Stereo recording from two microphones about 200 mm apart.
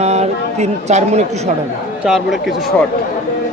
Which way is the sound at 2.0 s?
Centre (ahead or behind).